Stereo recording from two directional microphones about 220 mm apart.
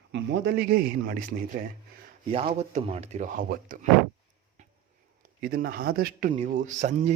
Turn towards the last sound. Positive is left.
turn(degrees=-35)  # may be behind; listen again after turning